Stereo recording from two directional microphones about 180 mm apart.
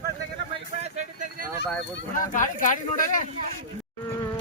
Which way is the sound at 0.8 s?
40° right (ahead or behind).